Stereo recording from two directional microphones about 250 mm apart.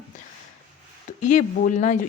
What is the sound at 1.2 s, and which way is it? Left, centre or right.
Speech, left.